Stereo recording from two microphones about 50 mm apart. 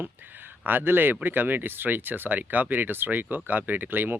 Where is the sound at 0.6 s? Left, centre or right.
Right.